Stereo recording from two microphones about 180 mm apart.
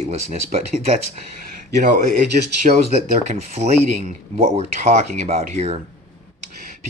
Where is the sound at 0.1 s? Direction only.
35° right (ahead or behind).